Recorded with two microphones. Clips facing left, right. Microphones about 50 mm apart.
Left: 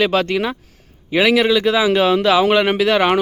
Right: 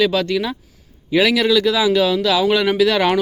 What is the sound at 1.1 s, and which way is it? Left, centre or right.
Speech, left.